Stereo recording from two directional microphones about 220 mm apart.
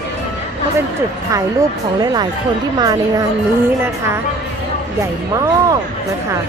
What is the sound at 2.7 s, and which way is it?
Speech, 15° right (ahead or behind).